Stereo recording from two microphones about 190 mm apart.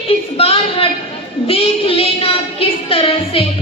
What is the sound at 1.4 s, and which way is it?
Child singing, 30° left (ahead or behind).